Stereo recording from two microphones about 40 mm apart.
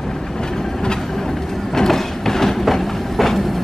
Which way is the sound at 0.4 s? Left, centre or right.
Centre.